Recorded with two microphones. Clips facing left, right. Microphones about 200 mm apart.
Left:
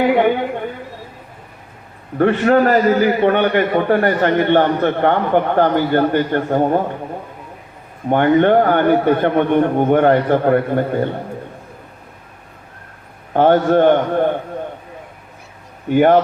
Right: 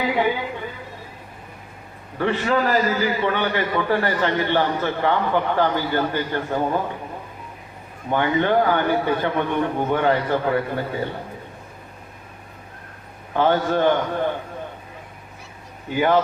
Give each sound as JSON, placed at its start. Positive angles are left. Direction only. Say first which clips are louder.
{"t": 0.0, "sound": "a man's voice", "louder": "left 7 dB", "side_deg": 60}
{"t": 2.1, "sound": "a man's voice", "louder": "left 8 dB", "side_deg": 55}
{"t": 8.1, "sound": "a man's voice", "louder": "left 7 dB", "side_deg": 55}
{"t": 13.3, "sound": "a man's voice", "louder": "left 7 dB", "side_deg": 55}
{"t": 15.9, "sound": "a man's voice", "louder": "left 7 dB", "side_deg": 55}